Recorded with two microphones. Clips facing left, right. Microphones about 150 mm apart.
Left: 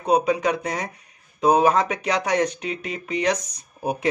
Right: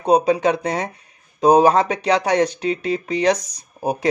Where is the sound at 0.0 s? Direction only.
30° right (ahead or behind).